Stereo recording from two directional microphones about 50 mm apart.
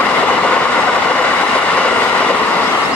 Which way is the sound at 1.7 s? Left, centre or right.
Left.